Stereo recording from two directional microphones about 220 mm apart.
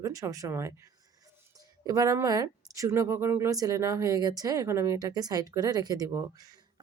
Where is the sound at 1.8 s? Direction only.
15° right (ahead or behind).